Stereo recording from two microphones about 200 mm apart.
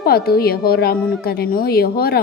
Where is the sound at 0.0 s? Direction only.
50° left (ahead or behind).